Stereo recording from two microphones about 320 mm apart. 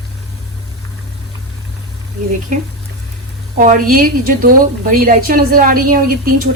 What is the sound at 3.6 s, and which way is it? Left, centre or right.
A woman's voice, right.